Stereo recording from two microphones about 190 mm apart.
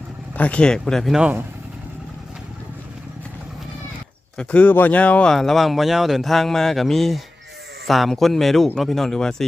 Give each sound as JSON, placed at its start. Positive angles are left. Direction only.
{"t": 0.3, "sound": "speech", "side_deg": 5}
{"t": 4.4, "sound": "speech", "side_deg": 5}